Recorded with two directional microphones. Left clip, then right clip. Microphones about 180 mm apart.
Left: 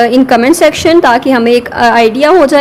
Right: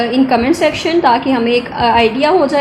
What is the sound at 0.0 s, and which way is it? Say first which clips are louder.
A woman's voice: left 6 dB; 50° left (ahead or behind).